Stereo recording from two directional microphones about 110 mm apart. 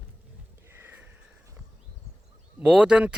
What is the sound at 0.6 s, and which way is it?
Sniff, 20° right (ahead or behind).